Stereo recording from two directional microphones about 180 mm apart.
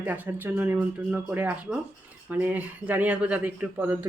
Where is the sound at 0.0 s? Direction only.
10° right (ahead or behind).